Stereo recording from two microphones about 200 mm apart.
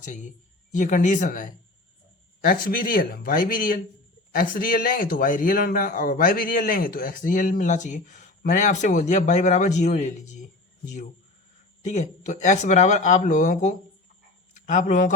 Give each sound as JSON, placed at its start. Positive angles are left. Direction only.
{"t": 0.0, "sound": "a man's voice", "side_deg": 40}
{"t": 11.8, "sound": "speech", "side_deg": 35}